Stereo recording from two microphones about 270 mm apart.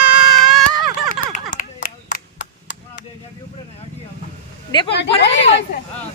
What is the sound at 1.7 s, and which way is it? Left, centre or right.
Clapping, left.